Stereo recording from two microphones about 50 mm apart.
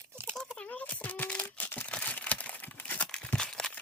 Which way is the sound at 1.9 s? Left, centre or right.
Left.